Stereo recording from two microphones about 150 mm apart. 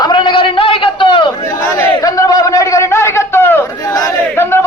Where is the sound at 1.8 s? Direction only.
25° left (ahead or behind).